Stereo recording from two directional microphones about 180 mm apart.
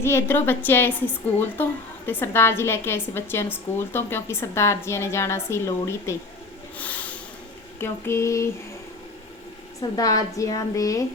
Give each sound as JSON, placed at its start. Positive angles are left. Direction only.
{"t": 0.0, "sound": "a woman's voice", "side_deg": 15}
{"t": 6.7, "sound": "a sound", "side_deg": 10}
{"t": 7.8, "sound": "a woman's voice", "side_deg": 15}
{"t": 9.9, "sound": "a woman's voice", "side_deg": 20}